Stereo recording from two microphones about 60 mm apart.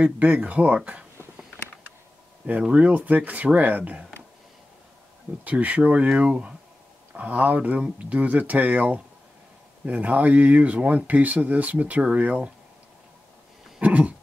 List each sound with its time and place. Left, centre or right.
0.0 s speech: right
2.7 s speech: right
5.4 s speech: right
13.7 s dog: right